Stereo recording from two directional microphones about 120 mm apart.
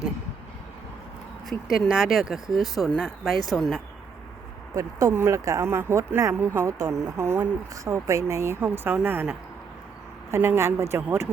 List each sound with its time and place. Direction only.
1.5 s speech: centre (ahead or behind)
4.7 s speech: 25° right (ahead or behind)
10.3 s speech: 20° right (ahead or behind)